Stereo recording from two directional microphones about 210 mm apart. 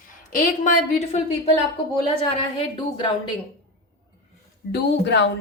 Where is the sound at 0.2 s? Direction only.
35° left (ahead or behind).